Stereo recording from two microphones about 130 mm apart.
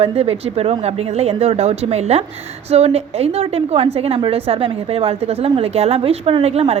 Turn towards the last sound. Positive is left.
turn(degrees=-55)  # may be behind; listen again after turning